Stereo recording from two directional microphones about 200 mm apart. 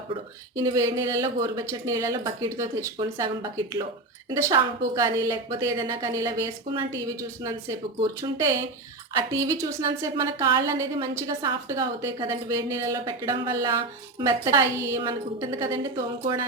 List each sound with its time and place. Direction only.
0.5 s a woman's voice: 15° right (ahead or behind)